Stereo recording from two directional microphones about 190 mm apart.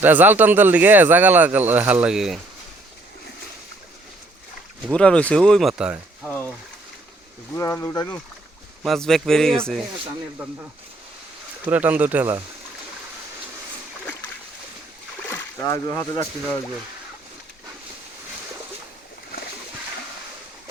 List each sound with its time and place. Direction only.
0.0 s speech: 10° right (ahead or behind)
4.9 s speech: 5° left (ahead or behind)
7.5 s speech: 15° left (ahead or behind)
8.8 s speech: centre (ahead or behind)
11.6 s speech: 10° right (ahead or behind)
15.3 s speech: 15° left (ahead or behind)